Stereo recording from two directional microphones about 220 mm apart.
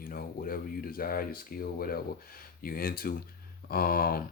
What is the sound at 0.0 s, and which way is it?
Speech, 40° left (ahead or behind).